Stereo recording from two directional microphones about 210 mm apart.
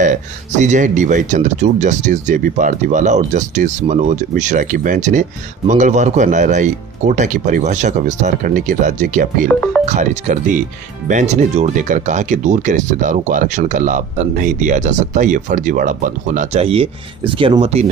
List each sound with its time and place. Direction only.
0.6 s speech: 35° right (ahead or behind)
9.5 s speech: 5° left (ahead or behind)
9.8 s speech: 35° right (ahead or behind)